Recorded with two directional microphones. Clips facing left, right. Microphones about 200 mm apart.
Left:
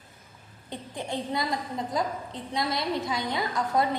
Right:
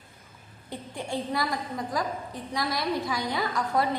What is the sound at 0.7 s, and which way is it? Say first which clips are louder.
A woman's voice: even; 20° left (ahead or behind).